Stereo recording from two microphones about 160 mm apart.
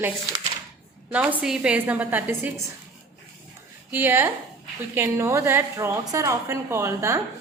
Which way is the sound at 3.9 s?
15° right (ahead or behind).